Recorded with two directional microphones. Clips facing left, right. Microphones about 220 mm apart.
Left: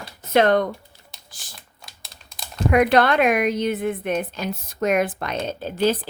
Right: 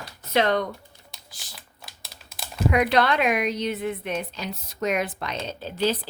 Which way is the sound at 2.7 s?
50° left (ahead or behind).